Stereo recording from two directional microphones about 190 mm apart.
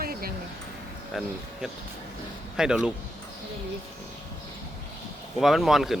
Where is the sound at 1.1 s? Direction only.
Centre (ahead or behind).